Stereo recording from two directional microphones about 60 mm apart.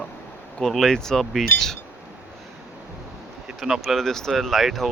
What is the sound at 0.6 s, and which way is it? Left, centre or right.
Speech, centre.